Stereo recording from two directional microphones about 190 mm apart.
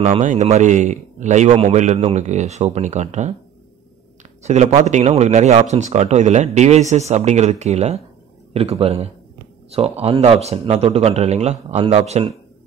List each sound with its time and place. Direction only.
0.0 s speech: 40° right (ahead or behind)
4.4 s speech: 35° right (ahead or behind)